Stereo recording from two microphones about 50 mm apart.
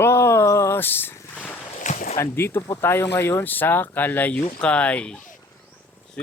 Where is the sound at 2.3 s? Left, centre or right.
Left.